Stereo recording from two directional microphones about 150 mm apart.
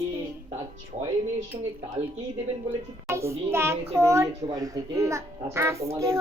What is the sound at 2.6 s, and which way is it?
A child's voice, 20° right (ahead or behind).